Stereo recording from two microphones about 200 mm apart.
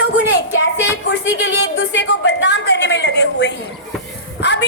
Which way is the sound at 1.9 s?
60° left (ahead or behind).